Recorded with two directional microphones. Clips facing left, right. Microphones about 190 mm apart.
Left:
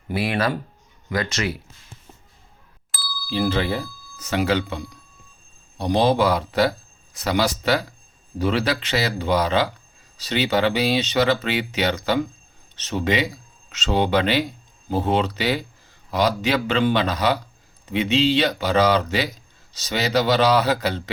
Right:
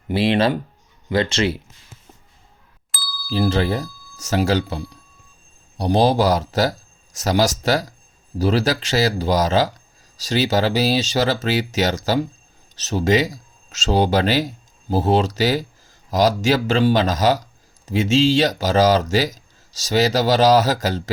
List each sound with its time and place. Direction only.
0.1 s speech: 25° right (ahead or behind)
2.9 s ding: centre (ahead or behind)
3.2 s speech: 40° right (ahead or behind)